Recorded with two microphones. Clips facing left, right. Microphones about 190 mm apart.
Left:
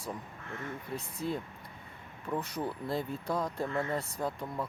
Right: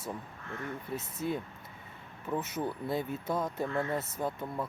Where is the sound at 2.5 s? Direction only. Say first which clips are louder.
Right 1 dB; centre (ahead or behind).